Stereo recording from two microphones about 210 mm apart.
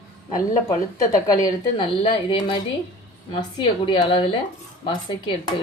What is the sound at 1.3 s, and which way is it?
Speech, 20° left (ahead or behind).